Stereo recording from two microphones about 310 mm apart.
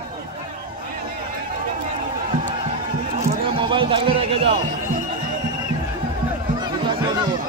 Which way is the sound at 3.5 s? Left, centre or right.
Centre.